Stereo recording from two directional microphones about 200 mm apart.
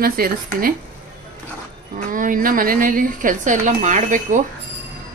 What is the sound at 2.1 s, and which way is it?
A woman's voice, 45° right (ahead or behind).